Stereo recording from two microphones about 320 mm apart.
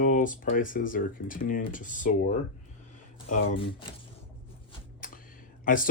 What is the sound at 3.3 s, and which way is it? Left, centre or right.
Speech, left.